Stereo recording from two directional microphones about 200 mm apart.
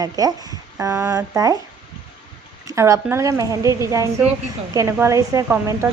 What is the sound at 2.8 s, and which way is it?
Speech, 15° right (ahead or behind).